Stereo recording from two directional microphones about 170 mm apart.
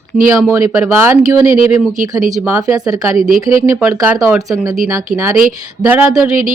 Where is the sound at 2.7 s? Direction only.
20° right (ahead or behind).